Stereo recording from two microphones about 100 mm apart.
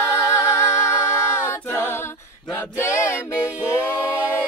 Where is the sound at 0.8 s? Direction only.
25° left (ahead or behind).